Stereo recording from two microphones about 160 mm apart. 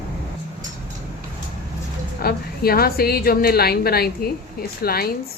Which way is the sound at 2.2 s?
70° left (ahead or behind).